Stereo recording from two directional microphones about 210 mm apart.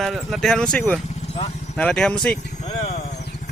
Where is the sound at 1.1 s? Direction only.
30° left (ahead or behind).